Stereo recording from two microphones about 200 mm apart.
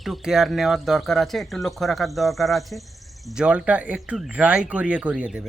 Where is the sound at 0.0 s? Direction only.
Centre (ahead or behind).